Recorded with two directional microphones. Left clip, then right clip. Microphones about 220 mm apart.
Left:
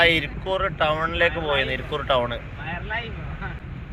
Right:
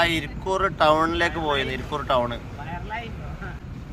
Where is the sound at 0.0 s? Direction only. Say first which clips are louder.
Left 4 dB; 15° right (ahead or behind).